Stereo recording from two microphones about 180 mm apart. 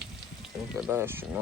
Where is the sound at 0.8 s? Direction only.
10° right (ahead or behind).